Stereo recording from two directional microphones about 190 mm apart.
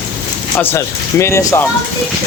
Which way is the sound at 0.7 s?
15° left (ahead or behind).